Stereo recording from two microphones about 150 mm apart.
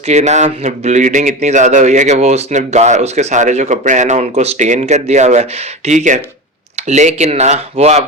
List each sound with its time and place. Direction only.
0.1 s speech: 50° right (ahead or behind)